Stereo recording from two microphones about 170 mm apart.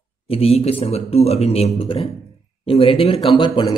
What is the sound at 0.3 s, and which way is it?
A man's voice, 35° left (ahead or behind).